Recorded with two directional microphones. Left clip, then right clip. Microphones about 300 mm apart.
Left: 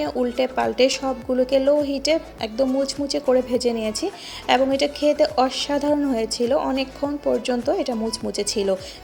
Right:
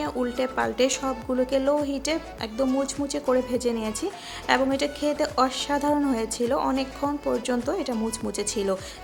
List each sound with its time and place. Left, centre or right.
0.2 s a woman's voice: centre